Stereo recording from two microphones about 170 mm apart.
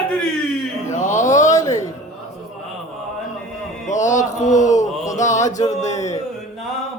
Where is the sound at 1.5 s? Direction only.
20° left (ahead or behind).